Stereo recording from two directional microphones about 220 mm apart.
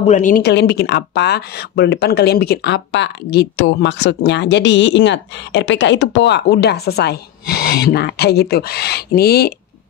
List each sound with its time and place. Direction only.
0.0 s speech: 35° left (ahead or behind)